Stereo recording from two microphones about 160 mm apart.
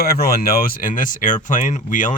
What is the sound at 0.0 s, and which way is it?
Speech, 75° left (ahead or behind).